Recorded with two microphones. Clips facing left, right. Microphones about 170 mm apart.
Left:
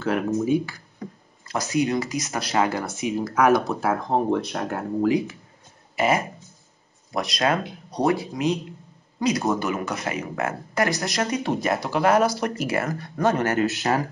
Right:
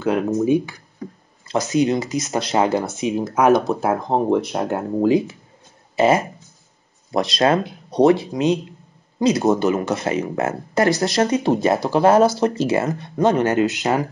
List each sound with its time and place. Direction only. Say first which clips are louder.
0.0 s speech: right 4 dB; 20° right (ahead or behind)